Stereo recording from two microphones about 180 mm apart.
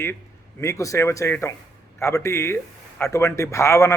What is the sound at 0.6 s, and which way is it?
A man's voice, 15° left (ahead or behind).